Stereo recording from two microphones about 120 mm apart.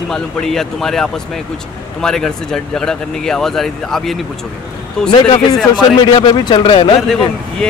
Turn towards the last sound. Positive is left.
turn(degrees=5)  # may be behind; listen again after turning